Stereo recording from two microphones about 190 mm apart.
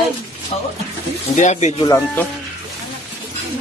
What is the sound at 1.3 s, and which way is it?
Speech, 40° left (ahead or behind).